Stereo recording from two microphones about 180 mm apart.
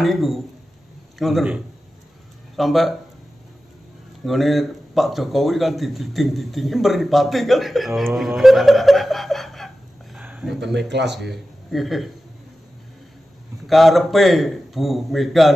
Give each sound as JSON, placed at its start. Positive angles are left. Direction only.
{"t": 0.0, "sound": "speech", "side_deg": 0}
{"t": 4.2, "sound": "speech", "side_deg": 0}
{"t": 10.1, "sound": "a sound", "side_deg": -5}
{"t": 10.6, "sound": "speech", "side_deg": -70}
{"t": 11.7, "sound": "speech", "side_deg": 0}
{"t": 13.7, "sound": "speech", "side_deg": 0}